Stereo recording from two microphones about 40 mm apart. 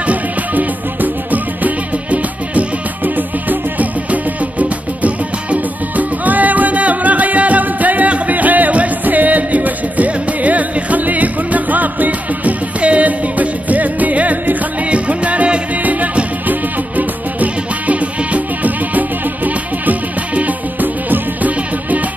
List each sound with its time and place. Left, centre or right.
0.0 s music: right